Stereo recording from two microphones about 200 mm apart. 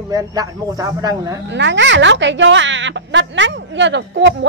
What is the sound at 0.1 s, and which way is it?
Speech, 20° right (ahead or behind).